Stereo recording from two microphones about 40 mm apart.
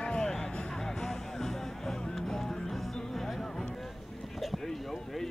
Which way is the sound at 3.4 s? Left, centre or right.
Centre.